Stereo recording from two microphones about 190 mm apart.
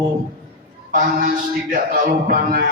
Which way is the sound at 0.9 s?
45° right (ahead or behind).